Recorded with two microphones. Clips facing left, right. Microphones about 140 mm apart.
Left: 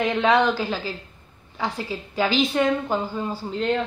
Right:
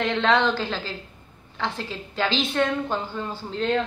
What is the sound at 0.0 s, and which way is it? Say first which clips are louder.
A woman's voice: left 2 dB; 10° left (ahead or behind).